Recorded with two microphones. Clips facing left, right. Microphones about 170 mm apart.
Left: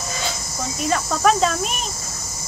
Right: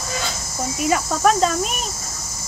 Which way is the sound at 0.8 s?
5° right (ahead or behind).